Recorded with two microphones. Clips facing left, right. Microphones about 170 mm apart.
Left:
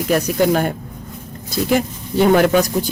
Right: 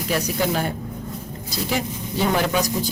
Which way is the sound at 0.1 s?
50° left (ahead or behind).